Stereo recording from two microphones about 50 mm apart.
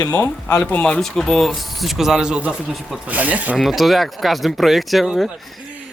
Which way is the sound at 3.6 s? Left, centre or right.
Centre.